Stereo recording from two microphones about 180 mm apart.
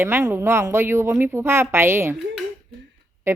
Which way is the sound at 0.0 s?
15° right (ahead or behind).